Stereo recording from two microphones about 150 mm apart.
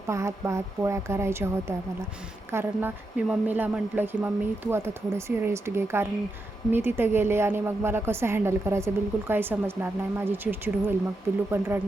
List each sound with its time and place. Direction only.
0.1 s a woman's voice: 20° right (ahead or behind)